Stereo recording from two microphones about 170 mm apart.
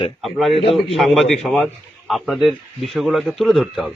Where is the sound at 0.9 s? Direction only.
Centre (ahead or behind).